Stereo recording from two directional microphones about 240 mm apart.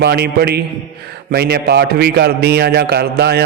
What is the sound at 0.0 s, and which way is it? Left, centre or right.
A man's voice, right.